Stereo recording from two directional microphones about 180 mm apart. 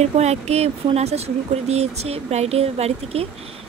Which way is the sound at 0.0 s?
35° right (ahead or behind).